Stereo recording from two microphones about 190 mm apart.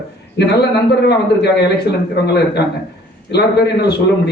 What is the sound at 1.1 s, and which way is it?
Speech, 60° left (ahead or behind).